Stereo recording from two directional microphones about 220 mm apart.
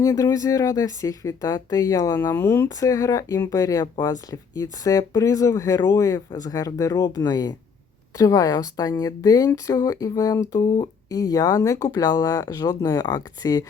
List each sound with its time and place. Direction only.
0.0 s speech: 15° left (ahead or behind)